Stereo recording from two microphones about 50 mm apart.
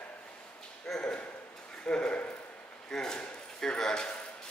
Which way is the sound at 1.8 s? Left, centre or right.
Centre.